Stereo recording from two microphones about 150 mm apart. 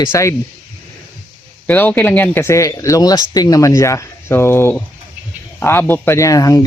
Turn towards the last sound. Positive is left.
turn(degrees=25)  # may be behind; listen again after turning